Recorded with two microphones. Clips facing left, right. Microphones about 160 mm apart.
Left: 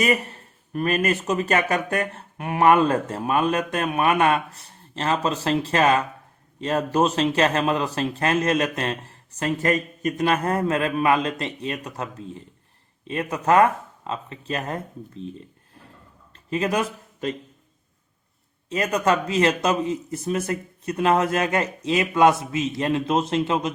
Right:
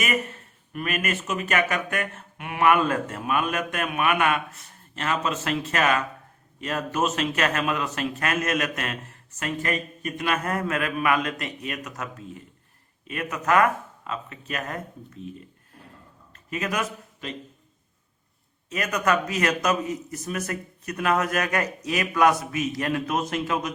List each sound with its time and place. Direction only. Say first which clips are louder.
0.0 s a man's voice: left 5 dB; 35° left (ahead or behind)
18.7 s speech: left 3 dB; 30° left (ahead or behind)